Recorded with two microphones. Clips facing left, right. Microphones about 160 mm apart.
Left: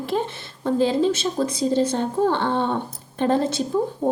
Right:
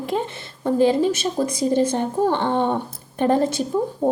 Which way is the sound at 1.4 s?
45° right (ahead or behind).